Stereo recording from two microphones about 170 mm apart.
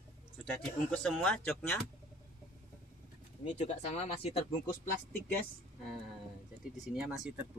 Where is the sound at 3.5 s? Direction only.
40° left (ahead or behind).